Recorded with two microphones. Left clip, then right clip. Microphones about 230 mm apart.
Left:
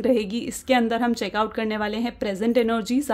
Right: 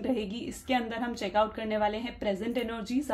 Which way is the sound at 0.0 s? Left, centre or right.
Left.